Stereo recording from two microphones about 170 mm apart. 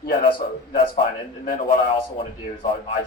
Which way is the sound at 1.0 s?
50° left (ahead or behind).